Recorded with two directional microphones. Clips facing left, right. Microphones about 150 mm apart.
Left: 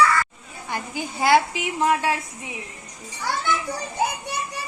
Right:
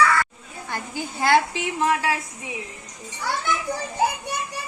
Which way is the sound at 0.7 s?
15° left (ahead or behind).